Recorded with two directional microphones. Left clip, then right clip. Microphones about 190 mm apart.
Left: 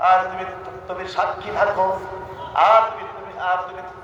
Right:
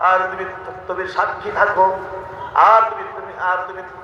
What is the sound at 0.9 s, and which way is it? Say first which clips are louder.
A man's voice: right 3 dB; 20° left (ahead or behind).